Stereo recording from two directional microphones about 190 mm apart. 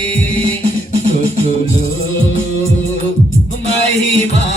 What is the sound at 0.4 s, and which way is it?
Music, 30° right (ahead or behind).